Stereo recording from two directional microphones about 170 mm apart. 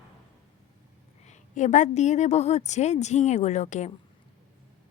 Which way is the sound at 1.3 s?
45° left (ahead or behind).